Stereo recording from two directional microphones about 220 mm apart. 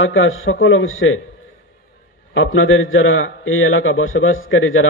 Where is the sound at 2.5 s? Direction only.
65° left (ahead or behind).